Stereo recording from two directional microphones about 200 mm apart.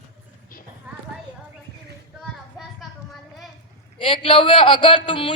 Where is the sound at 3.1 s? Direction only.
Centre (ahead or behind).